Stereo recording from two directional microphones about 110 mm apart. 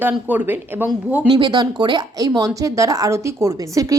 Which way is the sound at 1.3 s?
40° right (ahead or behind).